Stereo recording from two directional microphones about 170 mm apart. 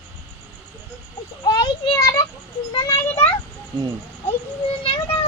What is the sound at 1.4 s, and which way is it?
Children playing, 25° left (ahead or behind).